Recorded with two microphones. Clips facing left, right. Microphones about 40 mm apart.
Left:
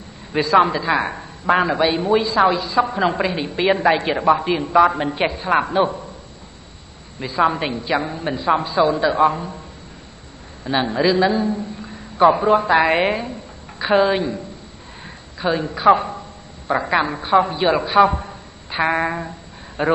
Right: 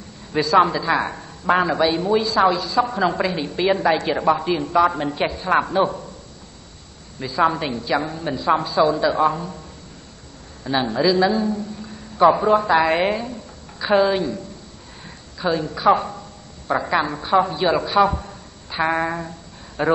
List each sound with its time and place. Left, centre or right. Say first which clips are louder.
0.3 s speech: left 1 dB; left
7.2 s speech: left 1 dB; centre
10.6 s a man's voice: left 1 dB; left